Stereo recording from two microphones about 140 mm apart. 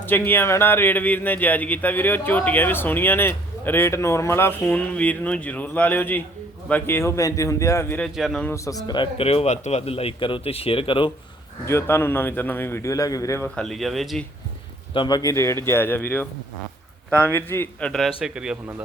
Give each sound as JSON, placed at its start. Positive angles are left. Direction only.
{"t": 0.0, "sound": "a man's voice", "side_deg": 15}
{"t": 8.0, "sound": "speech", "side_deg": 0}
{"t": 8.4, "sound": "speech", "side_deg": 20}
{"t": 11.6, "sound": "speech", "side_deg": 20}
{"t": 13.6, "sound": "speech", "side_deg": 0}
{"t": 14.9, "sound": "a man's voice", "side_deg": 30}
{"t": 18.2, "sound": "speech", "side_deg": -5}